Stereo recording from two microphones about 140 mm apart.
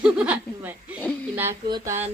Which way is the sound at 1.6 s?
25° right (ahead or behind).